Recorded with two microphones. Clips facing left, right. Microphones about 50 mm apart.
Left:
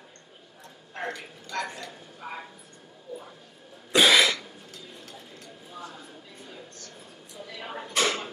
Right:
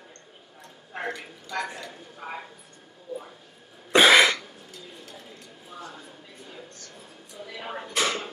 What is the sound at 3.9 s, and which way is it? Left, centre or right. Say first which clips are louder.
Cough: right 3 dB; right.